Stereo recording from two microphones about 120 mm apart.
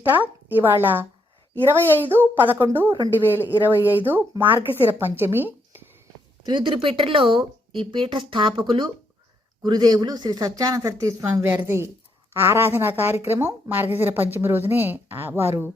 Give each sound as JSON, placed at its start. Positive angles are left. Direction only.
{"t": 0.0, "sound": "a woman's voice", "side_deg": -15}
{"t": 6.4, "sound": "a woman's voice", "side_deg": -40}